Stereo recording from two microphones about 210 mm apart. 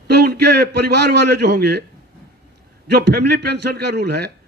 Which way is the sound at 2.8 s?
50° right (ahead or behind).